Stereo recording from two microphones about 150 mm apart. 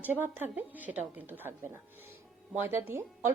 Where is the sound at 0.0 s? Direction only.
15° right (ahead or behind).